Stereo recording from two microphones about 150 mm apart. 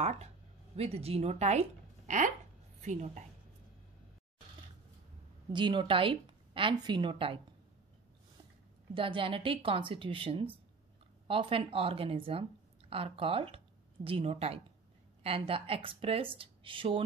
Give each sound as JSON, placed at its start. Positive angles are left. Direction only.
{"t": 0.0, "sound": "a woman's voice", "side_deg": -45}
{"t": 5.5, "sound": "speech", "side_deg": -30}
{"t": 8.9, "sound": "speech", "side_deg": -35}